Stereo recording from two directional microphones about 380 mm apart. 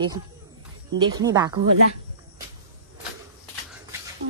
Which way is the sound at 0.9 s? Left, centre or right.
Centre.